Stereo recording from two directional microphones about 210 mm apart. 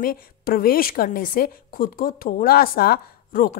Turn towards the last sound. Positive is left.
turn(degrees=40)  # may be behind; listen again after turning